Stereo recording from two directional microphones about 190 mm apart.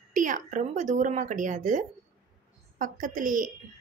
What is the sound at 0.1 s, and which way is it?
Speech, 40° right (ahead or behind).